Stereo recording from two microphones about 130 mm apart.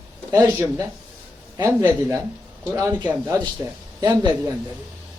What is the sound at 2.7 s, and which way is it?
Speech, 20° right (ahead or behind).